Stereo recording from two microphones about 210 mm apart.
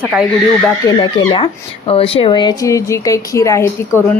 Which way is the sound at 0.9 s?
20° left (ahead or behind).